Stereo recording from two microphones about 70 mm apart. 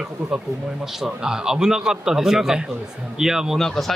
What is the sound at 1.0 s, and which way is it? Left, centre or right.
Speech, centre.